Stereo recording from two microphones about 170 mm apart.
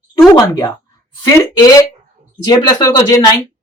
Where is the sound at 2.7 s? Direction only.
20° left (ahead or behind).